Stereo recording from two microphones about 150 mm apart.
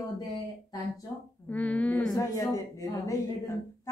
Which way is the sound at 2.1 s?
20° left (ahead or behind).